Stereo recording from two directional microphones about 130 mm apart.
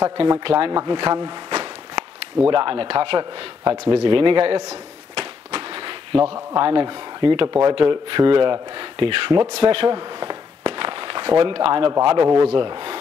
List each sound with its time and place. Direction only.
0.4 s speech: 40° right (ahead or behind)
1.1 s a sound: 35° right (ahead or behind)
2.5 s speech: 40° right (ahead or behind)
4.6 s a sound: 45° right (ahead or behind)
6.3 s speech: 35° right (ahead or behind)
7.4 s speech: 25° right (ahead or behind)
7.7 s speech: 40° right (ahead or behind)
9.6 s walk: 40° right (ahead or behind)
12.0 s speech: 35° right (ahead or behind)